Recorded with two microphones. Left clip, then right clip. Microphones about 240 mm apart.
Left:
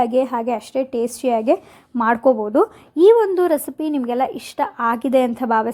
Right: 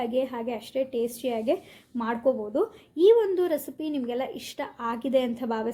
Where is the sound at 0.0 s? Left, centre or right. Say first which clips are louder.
Left 10 dB; left.